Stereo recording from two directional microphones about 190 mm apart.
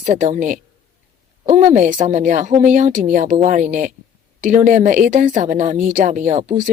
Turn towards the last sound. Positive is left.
turn(degrees=-45)  # may be behind; listen again after turning